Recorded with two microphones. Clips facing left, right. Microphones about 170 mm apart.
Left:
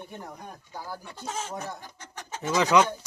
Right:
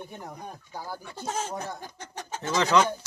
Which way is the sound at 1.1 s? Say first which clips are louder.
Right 3 dB; 30° right (ahead or behind).